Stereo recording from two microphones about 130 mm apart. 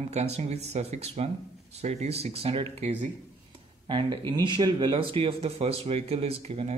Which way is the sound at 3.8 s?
40° right (ahead or behind).